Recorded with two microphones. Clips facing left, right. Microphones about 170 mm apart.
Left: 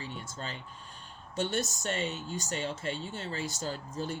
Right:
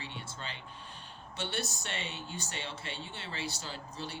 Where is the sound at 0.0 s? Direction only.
45° left (ahead or behind).